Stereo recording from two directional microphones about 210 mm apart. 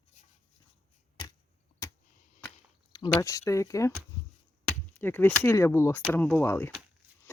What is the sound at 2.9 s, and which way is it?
Speech, 15° left (ahead or behind).